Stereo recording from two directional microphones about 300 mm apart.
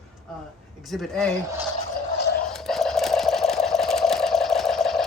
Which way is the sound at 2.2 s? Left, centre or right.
Left.